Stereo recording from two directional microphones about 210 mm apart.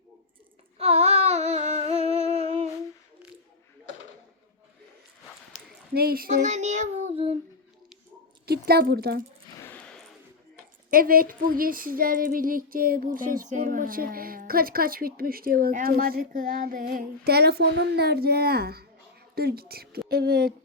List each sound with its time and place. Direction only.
0.8 s humming: 30° right (ahead or behind)
5.9 s child singing: 45° right (ahead or behind); by 7.3 s 30° right (ahead or behind)
8.4 s speech: 50° right (ahead or behind)
9.6 s a sound: 10° left (ahead or behind)
10.9 s female singing: 45° right (ahead or behind)